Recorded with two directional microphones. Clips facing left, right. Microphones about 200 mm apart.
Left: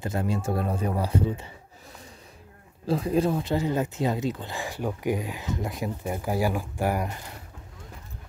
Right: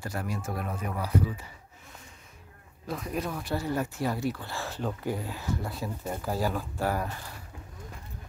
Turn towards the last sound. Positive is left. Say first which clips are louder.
# left 3 dB
turn(degrees=15)  # may be behind; listen again after turning